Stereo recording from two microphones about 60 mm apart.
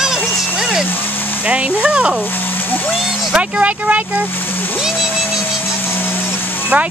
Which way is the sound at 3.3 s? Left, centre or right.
Right.